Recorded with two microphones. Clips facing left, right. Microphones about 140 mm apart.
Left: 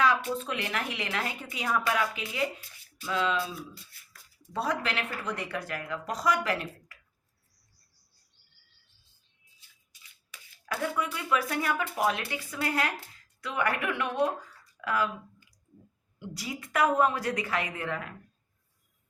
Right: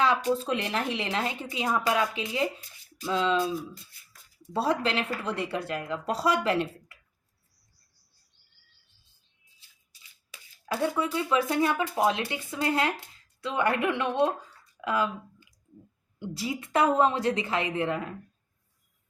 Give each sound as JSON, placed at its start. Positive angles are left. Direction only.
{"t": 0.0, "sound": "a woman's voice", "side_deg": -30}
{"t": 10.7, "sound": "a woman's voice", "side_deg": -30}
{"t": 14.8, "sound": "a sound", "side_deg": -20}
{"t": 16.1, "sound": "a woman's voice", "side_deg": -30}